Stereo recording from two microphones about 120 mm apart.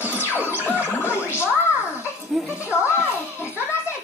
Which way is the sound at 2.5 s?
20° left (ahead or behind).